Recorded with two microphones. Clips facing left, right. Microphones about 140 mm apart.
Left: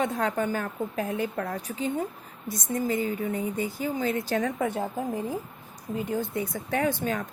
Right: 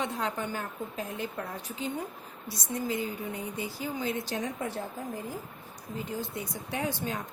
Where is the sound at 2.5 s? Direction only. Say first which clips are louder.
Left 5 dB; 50° left (ahead or behind).